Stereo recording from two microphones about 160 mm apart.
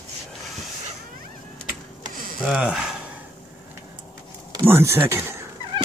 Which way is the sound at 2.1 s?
60° right (ahead or behind).